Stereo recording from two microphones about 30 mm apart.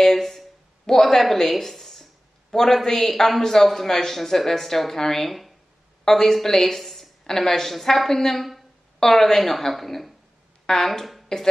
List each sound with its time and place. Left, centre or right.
0.0 s a sound: centre
1.0 s a man's voice: centre
8.4 s a woman's voice: centre
9.0 s a man's voice: centre
10.7 s speech: left